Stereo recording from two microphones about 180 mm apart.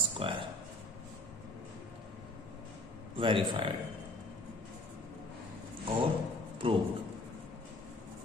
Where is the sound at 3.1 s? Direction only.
30° right (ahead or behind).